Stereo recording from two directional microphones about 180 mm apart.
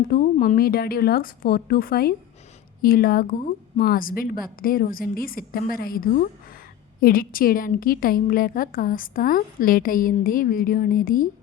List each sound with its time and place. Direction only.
0.1 s a woman's voice: 50° left (ahead or behind)